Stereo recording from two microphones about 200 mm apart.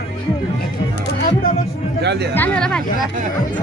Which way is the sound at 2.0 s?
55° right (ahead or behind).